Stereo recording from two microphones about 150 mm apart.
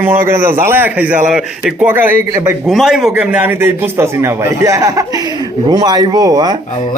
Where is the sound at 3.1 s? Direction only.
10° right (ahead or behind); by 6.5 s 25° right (ahead or behind).